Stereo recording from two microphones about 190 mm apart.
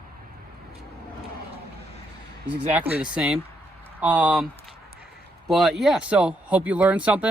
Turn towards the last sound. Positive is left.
turn(degrees=-5)  # may be behind; listen again after turning